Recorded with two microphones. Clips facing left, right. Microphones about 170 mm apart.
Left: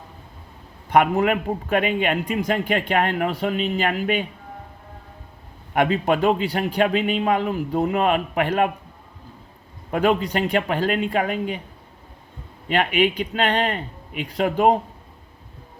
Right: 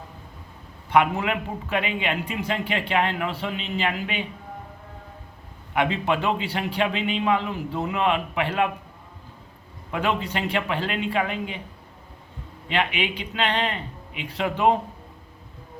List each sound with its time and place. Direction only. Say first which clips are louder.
0.9 s a man's voice: left 3 dB; 45° left (ahead or behind)
5.7 s a man's voice: left 4 dB; 45° left (ahead or behind)
9.9 s a man's voice: left 6 dB; 45° left (ahead or behind)
12.6 s a man's voice: left 6 dB; 45° left (ahead or behind)